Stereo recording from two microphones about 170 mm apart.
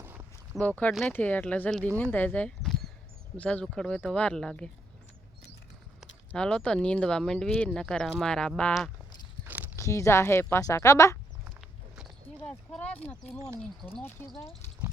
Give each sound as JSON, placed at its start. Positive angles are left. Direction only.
{"t": 0.0, "sound": "walk", "side_deg": -15}
{"t": 0.5, "sound": "speech", "side_deg": 0}
{"t": 6.3, "sound": "speech", "side_deg": 5}
{"t": 9.7, "sound": "speech", "side_deg": 15}
{"t": 12.5, "sound": "speech", "side_deg": 10}